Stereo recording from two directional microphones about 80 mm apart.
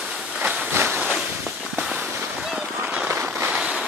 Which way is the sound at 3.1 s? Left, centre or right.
Right.